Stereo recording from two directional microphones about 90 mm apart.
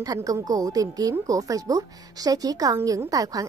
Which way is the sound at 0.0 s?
40° right (ahead or behind).